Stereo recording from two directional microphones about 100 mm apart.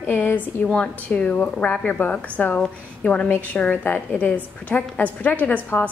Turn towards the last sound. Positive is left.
turn(degrees=15)  # may be behind; listen again after turning